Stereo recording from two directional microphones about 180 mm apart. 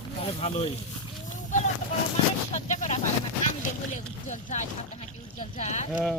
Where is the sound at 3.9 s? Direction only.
45° left (ahead or behind).